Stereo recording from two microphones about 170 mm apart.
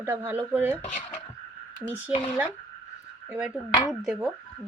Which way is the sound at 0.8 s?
50° left (ahead or behind).